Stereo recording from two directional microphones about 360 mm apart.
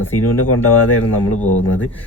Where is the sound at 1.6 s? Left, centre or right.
Left.